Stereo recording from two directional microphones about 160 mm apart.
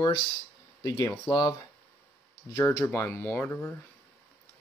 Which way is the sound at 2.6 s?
20° left (ahead or behind).